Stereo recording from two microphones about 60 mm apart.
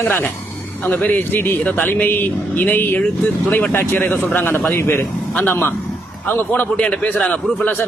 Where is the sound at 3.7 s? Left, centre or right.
Left; by 7.4 s centre.